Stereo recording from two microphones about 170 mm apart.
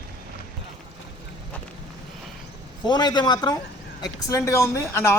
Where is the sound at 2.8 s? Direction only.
25° left (ahead or behind).